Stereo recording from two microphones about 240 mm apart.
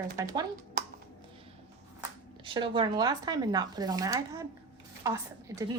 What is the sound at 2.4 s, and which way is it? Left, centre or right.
Speech, right.